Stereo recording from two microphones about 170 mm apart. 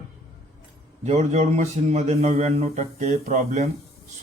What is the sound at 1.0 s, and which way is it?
A man's voice, 40° right (ahead or behind).